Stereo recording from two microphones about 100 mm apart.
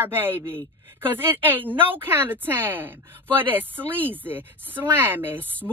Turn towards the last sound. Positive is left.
turn(degrees=-20)  # may be behind; listen again after turning